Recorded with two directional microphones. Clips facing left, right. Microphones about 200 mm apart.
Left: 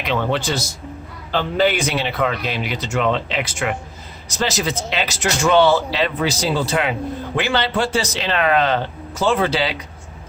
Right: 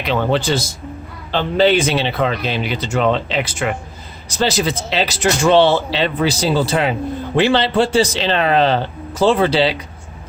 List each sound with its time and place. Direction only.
0.1 s speech: 35° right (ahead or behind)